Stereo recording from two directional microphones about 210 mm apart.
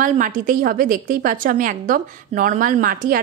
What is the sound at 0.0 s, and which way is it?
A woman's voice, 40° right (ahead or behind).